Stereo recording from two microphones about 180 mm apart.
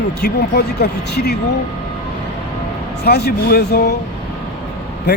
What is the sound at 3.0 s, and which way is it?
Speech, 65° left (ahead or behind).